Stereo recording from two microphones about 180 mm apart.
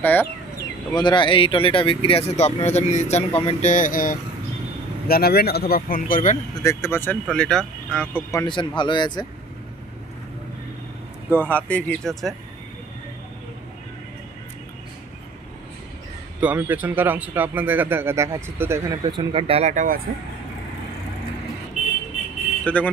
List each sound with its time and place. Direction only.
0.0 s speech: 10° left (ahead or behind)
0.9 s speech: 25° left (ahead or behind); by 6.3 s 50° left (ahead or behind)
6.6 s speech: 15° left (ahead or behind)
8.5 s speech: 25° left (ahead or behind)
11.2 s speech: 10° left (ahead or behind)
16.3 s a man's voice: 10° right (ahead or behind)
19.0 s speech: 30° right (ahead or behind); by 20.0 s 45° right (ahead or behind)
22.7 s speech: 10° left (ahead or behind)